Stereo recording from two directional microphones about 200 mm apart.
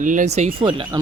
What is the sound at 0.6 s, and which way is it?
Speech, 25° right (ahead or behind).